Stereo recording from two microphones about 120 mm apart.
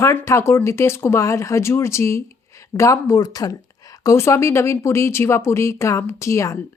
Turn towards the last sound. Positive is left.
turn(degrees=25)  # may be behind; listen again after turning